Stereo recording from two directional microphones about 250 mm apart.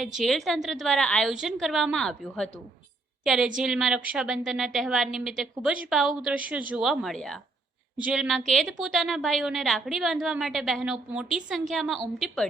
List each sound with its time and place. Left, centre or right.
0.2 s a woman's voice: centre